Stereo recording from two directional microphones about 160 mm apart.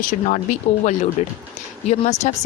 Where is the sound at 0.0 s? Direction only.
60° left (ahead or behind).